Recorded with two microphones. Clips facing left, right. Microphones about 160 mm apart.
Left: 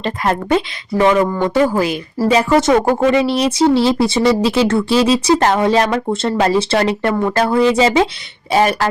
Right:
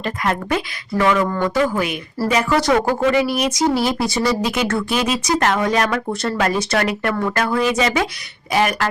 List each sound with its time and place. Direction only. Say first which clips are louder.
0.5 s speech: left 5 dB; 30° left (ahead or behind)
1.6 s speech: left 5 dB; 35° left (ahead or behind)